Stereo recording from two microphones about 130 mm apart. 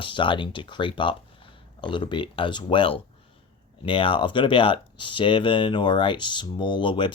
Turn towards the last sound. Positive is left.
turn(degrees=40)  # may be behind; listen again after turning